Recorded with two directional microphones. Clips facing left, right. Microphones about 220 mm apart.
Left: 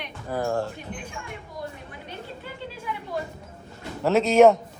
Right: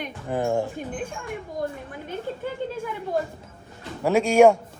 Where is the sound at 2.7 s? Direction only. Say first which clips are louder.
Right 1 dB; 50° right (ahead or behind).